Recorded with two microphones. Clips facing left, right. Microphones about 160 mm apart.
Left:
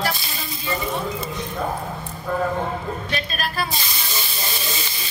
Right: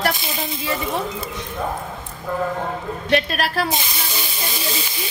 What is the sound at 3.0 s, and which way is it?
Speech, 70° right (ahead or behind).